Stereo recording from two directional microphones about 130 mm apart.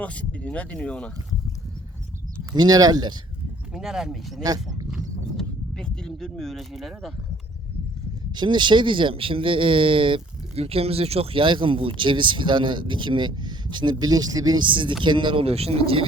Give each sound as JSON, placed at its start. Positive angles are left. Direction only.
{"t": 0.0, "sound": "speech", "side_deg": 10}
{"t": 2.5, "sound": "speech", "side_deg": -30}
{"t": 3.8, "sound": "speech", "side_deg": -5}
{"t": 4.9, "sound": "a sound", "side_deg": 0}
{"t": 8.4, "sound": "speech", "side_deg": -35}